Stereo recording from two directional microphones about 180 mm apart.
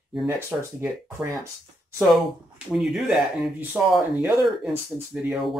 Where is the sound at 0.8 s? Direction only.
15° right (ahead or behind).